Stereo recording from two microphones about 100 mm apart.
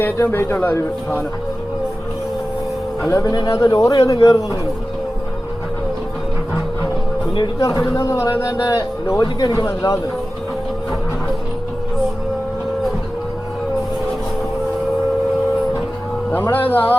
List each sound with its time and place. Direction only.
0.0 s a man's voice: 25° left (ahead or behind)
3.1 s a man's voice: 35° left (ahead or behind)
7.6 s a man's voice: 35° left (ahead or behind)
16.3 s a man's voice: 20° left (ahead or behind)